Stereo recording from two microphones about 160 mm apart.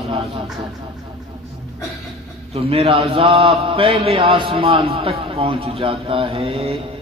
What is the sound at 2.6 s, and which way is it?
A man's voice, 35° right (ahead or behind).